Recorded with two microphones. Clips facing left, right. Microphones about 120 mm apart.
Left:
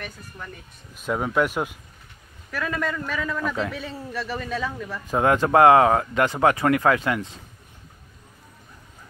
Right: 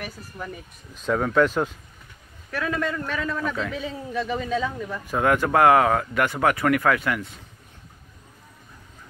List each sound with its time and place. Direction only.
0.0 s speech: 10° right (ahead or behind)
0.9 s speech: 10° left (ahead or behind)
2.5 s a man's voice: centre (ahead or behind)
5.0 s speech: 25° left (ahead or behind)